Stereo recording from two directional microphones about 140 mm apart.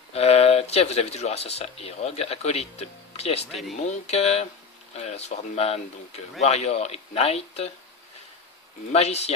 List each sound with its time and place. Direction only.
0.1 s speech: 45° left (ahead or behind)
8.9 s speech: 50° left (ahead or behind)